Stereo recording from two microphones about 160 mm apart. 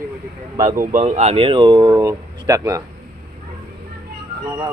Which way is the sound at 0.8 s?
50° right (ahead or behind).